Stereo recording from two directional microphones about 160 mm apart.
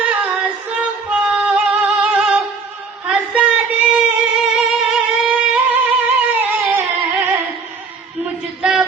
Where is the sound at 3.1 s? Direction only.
5° right (ahead or behind).